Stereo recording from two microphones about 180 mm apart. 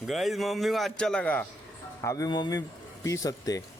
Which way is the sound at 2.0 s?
20° left (ahead or behind).